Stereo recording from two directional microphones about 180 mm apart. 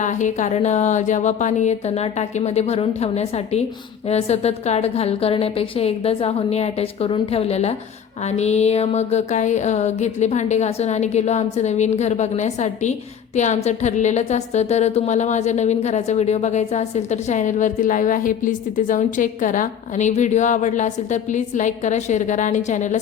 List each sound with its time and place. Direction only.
0.0 s a woman's voice: 45° left (ahead or behind)